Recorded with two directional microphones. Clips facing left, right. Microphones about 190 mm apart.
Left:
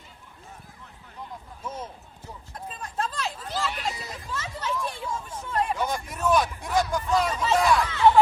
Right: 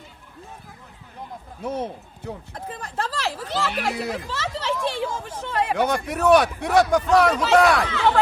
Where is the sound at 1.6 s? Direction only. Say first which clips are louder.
Right 10 dB; 65° right (ahead or behind).